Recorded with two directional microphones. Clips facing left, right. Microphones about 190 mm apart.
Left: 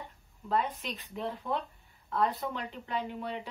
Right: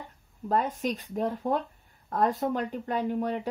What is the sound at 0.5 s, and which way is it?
Speech, 45° right (ahead or behind).